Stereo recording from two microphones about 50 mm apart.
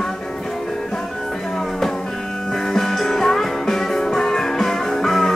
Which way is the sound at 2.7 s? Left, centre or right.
Centre.